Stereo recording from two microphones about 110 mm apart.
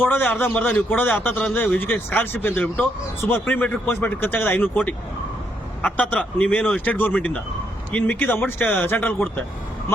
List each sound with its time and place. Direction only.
0.0 s speech: 15° left (ahead or behind)